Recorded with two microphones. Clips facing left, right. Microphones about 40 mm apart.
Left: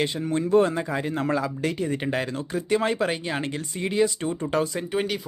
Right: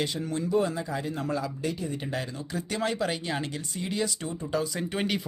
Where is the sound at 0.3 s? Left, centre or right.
Left.